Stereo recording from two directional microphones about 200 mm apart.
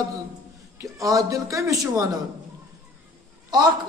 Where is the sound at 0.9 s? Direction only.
15° right (ahead or behind).